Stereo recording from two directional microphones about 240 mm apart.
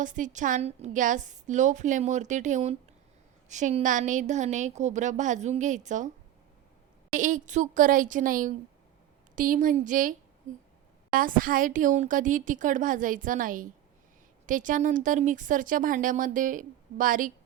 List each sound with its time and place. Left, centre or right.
0.0 s speech: right
7.1 s speech: right